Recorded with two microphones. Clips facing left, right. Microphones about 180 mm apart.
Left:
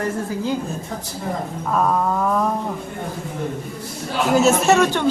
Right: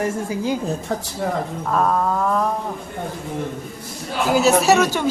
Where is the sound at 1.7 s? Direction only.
Centre (ahead or behind).